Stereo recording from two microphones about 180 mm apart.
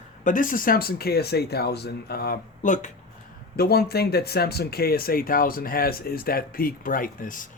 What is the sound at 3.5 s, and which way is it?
Speech, 60° left (ahead or behind).